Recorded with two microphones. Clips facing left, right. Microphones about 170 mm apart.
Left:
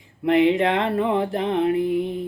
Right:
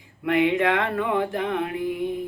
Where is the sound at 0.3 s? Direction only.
30° left (ahead or behind).